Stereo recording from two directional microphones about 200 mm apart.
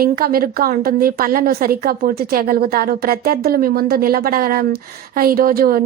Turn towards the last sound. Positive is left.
turn(degrees=-45)  # may be behind; listen again after turning